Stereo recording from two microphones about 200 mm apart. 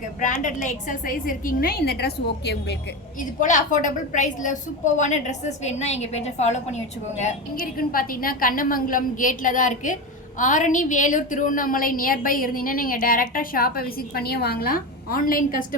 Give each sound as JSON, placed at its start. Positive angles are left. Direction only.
{"t": 0.4, "sound": "a woman's voice", "side_deg": 40}
{"t": 3.4, "sound": "a woman's voice", "side_deg": 40}